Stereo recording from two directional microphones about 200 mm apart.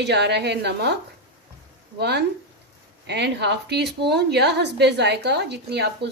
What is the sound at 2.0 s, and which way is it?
A woman's voice, 55° right (ahead or behind).